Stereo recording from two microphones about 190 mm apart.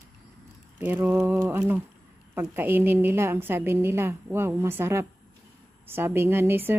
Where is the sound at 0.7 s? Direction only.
10° right (ahead or behind).